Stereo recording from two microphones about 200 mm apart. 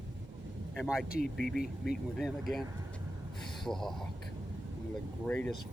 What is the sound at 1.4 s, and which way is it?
Speech, centre (ahead or behind).